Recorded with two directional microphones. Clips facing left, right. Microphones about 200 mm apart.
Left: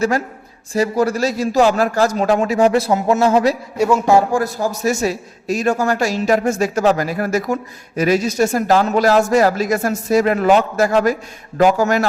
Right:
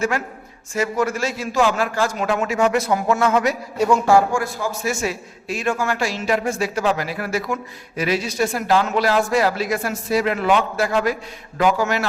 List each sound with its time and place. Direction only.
0.7 s a man's voice: 35° left (ahead or behind)
3.8 s a man's voice: 10° left (ahead or behind)
4.3 s a man's voice: 40° left (ahead or behind)